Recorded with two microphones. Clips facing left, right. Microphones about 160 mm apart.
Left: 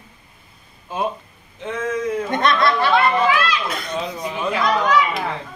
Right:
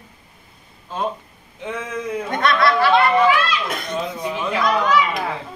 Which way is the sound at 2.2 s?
20° left (ahead or behind).